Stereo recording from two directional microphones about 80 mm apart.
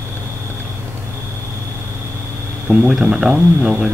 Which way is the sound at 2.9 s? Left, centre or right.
Centre.